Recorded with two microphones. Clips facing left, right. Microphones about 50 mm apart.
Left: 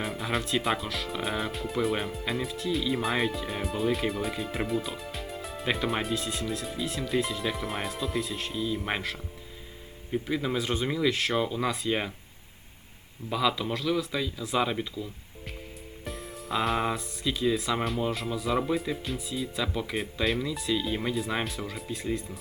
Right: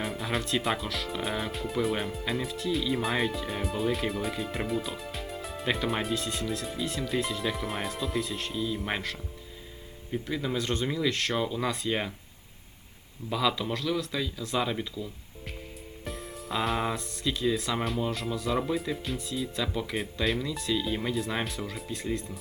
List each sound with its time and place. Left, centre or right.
0.0 s speech: centre
13.3 s speech: centre